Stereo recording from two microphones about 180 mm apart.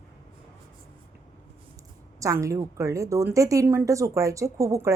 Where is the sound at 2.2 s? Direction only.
15° right (ahead or behind).